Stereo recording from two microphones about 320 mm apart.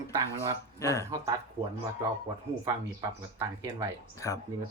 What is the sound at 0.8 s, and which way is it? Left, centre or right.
Speech, centre.